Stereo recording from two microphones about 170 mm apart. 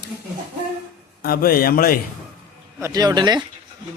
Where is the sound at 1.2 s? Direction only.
60° left (ahead or behind).